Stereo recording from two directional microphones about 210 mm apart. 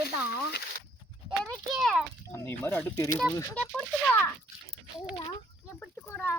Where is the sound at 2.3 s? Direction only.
10° left (ahead or behind).